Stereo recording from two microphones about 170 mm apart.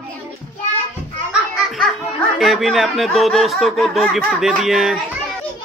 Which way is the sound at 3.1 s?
Centre (ahead or behind).